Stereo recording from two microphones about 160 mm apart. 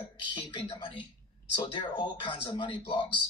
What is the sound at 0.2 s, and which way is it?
Speech, 30° left (ahead or behind).